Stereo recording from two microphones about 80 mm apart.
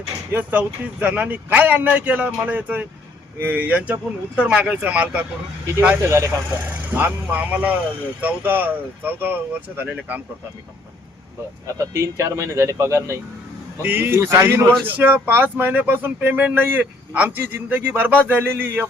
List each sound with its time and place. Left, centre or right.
0.3 s speech: right
6.0 s speech: right
6.7 s speech: right
11.6 s speech: right
13.8 s speech: right